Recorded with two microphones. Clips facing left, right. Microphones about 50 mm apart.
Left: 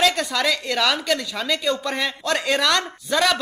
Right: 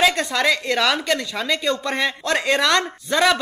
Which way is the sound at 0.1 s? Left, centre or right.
Centre.